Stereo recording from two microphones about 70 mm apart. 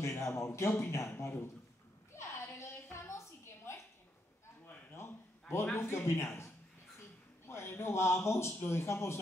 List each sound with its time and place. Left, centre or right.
0.0 s a man's voice: left
2.1 s a sound: left
5.5 s a man's voice: left